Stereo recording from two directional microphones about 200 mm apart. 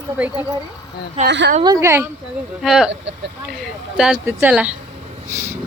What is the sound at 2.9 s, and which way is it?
Speech, 60° right (ahead or behind).